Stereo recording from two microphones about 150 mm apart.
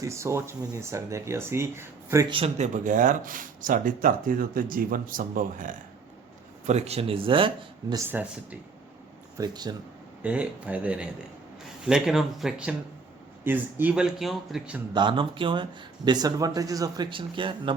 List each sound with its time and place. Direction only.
0.0 s speech: 20° right (ahead or behind)
2.3 s speech: 45° right (ahead or behind); by 5.7 s 65° right (ahead or behind)
6.7 s speech: 45° right (ahead or behind)
7.9 s a man's voice: 15° right (ahead or behind)
9.4 s speech: 25° right (ahead or behind)
10.2 s a man's voice: 10° right (ahead or behind)
14.9 s speech: 30° right (ahead or behind)